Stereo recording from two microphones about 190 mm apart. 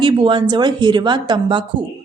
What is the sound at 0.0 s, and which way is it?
A woman's voice, 25° right (ahead or behind).